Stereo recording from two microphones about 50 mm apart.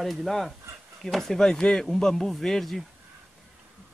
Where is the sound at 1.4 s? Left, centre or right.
Centre.